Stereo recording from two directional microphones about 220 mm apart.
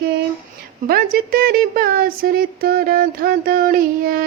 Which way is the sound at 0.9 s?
40° right (ahead or behind).